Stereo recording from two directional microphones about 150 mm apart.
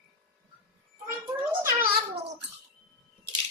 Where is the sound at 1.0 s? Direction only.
15° right (ahead or behind).